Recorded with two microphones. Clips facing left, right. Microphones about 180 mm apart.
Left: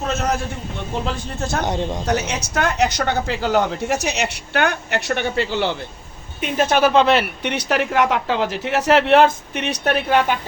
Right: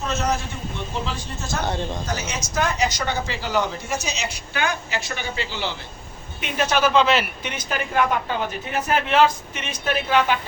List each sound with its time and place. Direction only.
1.4 s speech: 60° left (ahead or behind)
1.6 s speech: 15° left (ahead or behind)
2.0 s speech: 70° left (ahead or behind); by 10.3 s 50° left (ahead or behind)